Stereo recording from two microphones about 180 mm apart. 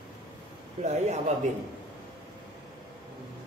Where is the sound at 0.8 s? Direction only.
40° right (ahead or behind).